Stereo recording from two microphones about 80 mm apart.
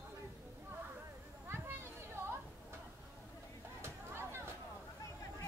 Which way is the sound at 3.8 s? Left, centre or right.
Right.